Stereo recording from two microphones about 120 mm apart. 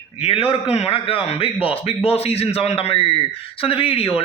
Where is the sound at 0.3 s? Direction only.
55° left (ahead or behind).